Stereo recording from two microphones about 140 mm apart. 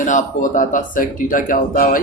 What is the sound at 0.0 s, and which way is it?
A man's voice, 65° left (ahead or behind).